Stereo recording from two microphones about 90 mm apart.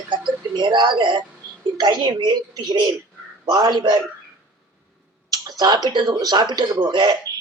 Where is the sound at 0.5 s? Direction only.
60° right (ahead or behind).